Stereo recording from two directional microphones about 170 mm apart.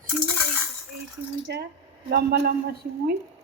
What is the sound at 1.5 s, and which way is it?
Speech, 85° right.